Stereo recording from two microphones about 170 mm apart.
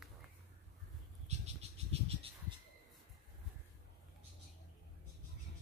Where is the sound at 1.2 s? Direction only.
40° right (ahead or behind).